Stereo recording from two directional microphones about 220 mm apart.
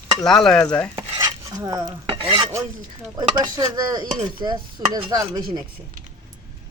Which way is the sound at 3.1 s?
15° right (ahead or behind).